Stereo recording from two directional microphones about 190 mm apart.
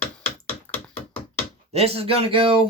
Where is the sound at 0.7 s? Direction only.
10° left (ahead or behind).